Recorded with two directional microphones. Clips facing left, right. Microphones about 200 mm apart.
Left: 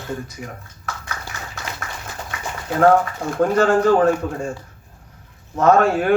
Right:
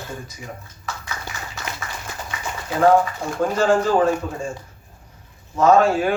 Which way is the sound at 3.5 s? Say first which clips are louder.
Left 2 dB; 60° left (ahead or behind).